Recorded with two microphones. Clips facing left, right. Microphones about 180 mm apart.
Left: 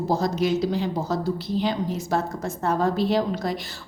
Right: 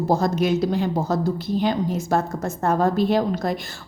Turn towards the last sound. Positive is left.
turn(degrees=-50)  # may be behind; listen again after turning